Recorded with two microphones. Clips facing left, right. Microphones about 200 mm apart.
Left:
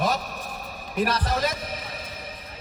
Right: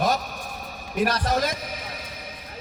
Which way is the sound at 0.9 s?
Centre (ahead or behind).